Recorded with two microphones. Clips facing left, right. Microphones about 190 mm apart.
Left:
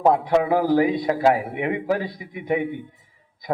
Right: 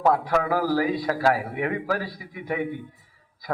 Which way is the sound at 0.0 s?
20° left (ahead or behind).